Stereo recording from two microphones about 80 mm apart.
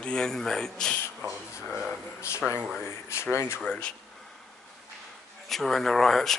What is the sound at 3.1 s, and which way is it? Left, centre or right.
Speech, left.